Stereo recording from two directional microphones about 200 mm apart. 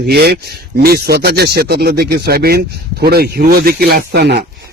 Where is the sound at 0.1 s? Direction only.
50° right (ahead or behind).